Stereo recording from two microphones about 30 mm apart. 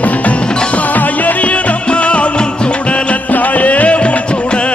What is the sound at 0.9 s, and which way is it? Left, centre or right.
Music, left.